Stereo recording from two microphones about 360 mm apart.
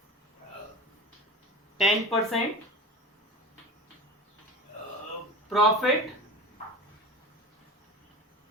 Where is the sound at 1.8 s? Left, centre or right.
Centre.